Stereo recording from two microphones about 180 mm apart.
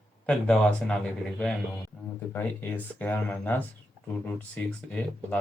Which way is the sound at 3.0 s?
10° left (ahead or behind).